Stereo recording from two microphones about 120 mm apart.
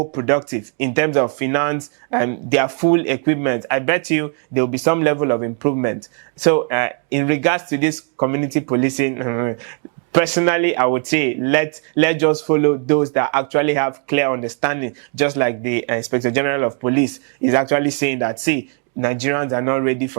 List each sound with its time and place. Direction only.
0.0 s speech: 20° right (ahead or behind)
0.3 s speech: 10° right (ahead or behind)